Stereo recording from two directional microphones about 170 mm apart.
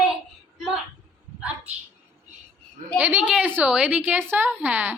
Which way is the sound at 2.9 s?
10° right (ahead or behind).